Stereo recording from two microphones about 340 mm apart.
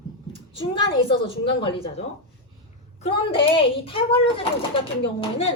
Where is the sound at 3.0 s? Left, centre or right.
Centre.